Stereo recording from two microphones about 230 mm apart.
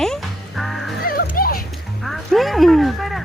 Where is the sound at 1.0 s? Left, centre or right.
Left.